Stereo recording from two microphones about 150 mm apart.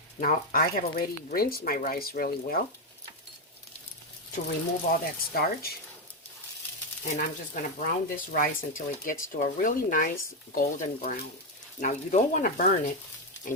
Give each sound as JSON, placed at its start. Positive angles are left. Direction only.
{"t": 0.2, "sound": "speech", "side_deg": 70}
{"t": 4.9, "sound": "speech", "side_deg": 90}
{"t": 7.1, "sound": "speech", "side_deg": 60}